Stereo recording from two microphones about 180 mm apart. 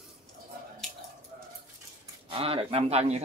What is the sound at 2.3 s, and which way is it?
Speech, 30° right (ahead or behind).